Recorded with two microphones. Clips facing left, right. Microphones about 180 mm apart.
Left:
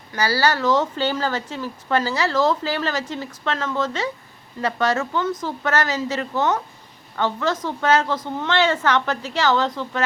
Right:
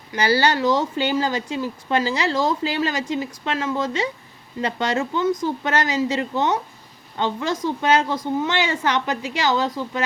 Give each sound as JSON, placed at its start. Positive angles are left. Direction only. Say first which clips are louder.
{"t": 0.1, "sound": "speech", "louder": "right 2 dB", "side_deg": -20}